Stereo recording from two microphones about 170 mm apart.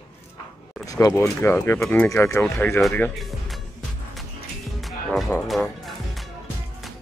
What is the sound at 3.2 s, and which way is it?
Speech, centre (ahead or behind).